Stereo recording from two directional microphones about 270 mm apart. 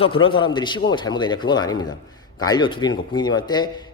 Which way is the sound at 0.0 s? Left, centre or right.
Centre.